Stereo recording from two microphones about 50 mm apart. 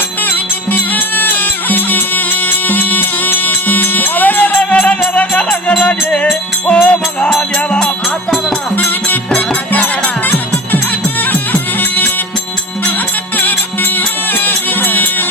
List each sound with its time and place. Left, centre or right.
0.2 s music: left
4.5 s music: left
8.7 s music: left
9.3 s music: left
13.3 s music: left